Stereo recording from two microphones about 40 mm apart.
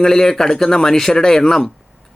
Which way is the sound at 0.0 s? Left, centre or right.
Centre.